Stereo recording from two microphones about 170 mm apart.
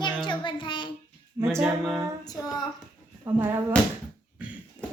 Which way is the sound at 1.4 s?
25° right (ahead or behind).